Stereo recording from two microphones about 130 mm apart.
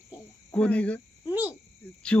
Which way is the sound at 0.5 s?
10° left (ahead or behind).